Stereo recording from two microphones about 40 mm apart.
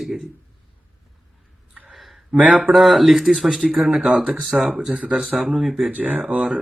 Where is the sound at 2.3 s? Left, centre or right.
Right.